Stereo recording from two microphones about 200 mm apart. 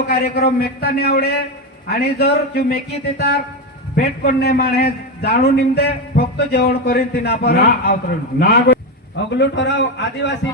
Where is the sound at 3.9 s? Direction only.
50° left (ahead or behind).